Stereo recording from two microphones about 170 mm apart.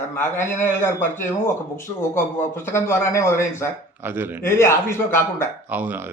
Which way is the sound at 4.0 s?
10° right (ahead or behind).